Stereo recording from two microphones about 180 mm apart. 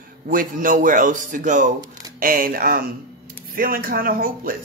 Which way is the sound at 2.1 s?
50° right (ahead or behind).